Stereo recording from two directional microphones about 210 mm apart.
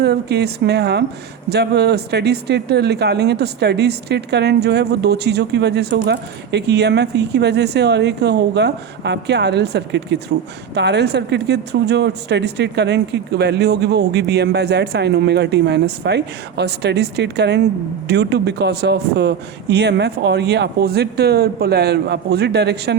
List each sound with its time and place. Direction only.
0.0 s speech: 50° right (ahead or behind)